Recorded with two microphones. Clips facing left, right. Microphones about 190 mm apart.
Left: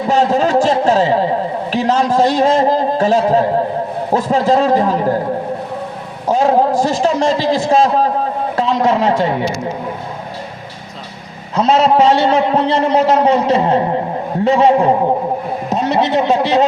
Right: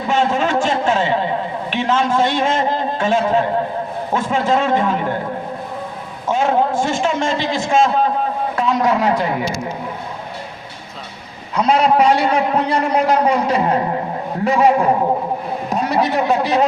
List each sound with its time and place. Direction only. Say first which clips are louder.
0.1 s a sound: left 4 dB; 35° left (ahead or behind)
4.1 s a man's voice: left 4 dB; 35° left (ahead or behind)
6.2 s a man's voice: left 4 dB; 35° left (ahead or behind)
8.5 s a man's voice: left 3 dB; 25° left (ahead or behind)
11.5 s a man's voice: left 3 dB; 25° left (ahead or behind)